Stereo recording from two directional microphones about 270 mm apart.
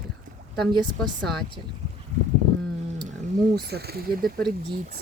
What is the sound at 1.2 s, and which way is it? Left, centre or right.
Speech, centre.